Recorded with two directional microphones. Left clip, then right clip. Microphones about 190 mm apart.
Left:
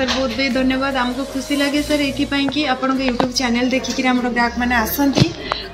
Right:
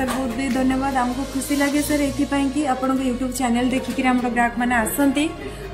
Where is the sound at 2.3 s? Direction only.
20° right (ahead or behind).